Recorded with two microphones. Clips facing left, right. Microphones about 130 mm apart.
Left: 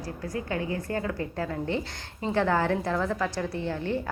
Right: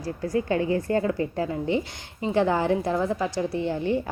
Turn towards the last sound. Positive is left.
turn(degrees=-15)  # may be behind; listen again after turning